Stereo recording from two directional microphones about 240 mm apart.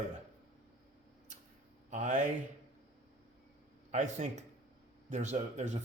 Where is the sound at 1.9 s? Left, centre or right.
Right.